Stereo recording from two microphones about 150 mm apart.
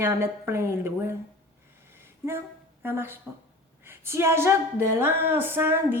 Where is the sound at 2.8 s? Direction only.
15° right (ahead or behind).